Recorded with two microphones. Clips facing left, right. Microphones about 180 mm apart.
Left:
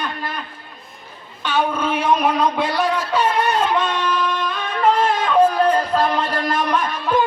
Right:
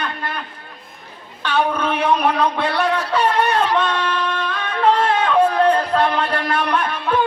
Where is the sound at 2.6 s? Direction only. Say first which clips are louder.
Even; 65° right (ahead or behind).